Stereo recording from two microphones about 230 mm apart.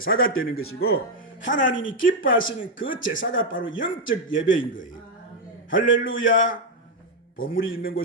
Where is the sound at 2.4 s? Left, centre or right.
Left.